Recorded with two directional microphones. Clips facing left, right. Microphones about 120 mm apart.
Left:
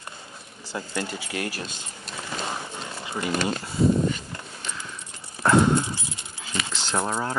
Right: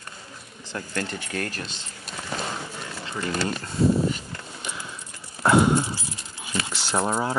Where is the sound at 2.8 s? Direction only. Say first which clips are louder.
Left 1 dB; 15° left (ahead or behind).